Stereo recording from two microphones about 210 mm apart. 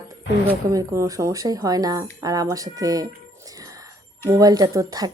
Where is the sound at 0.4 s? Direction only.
15° right (ahead or behind).